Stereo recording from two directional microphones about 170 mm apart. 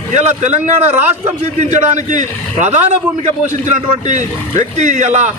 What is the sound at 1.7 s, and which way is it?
Speech, 45° right (ahead or behind).